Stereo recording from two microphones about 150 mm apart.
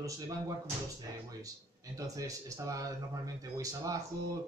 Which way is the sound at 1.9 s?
20° right (ahead or behind).